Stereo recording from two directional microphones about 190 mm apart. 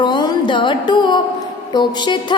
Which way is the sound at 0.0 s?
25° left (ahead or behind).